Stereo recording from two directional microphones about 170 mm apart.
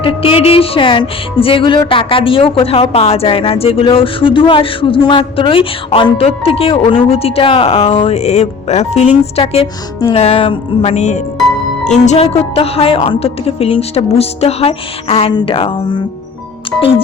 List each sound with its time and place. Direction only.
0.0 s speech: 30° left (ahead or behind)